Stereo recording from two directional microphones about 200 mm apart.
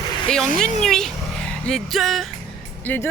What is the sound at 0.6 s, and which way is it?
Speech, centre (ahead or behind).